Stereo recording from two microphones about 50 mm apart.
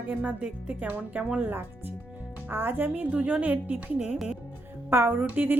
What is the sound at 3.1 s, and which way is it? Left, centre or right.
Speech, right.